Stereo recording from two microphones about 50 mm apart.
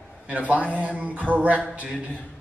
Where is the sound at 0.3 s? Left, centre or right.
Right.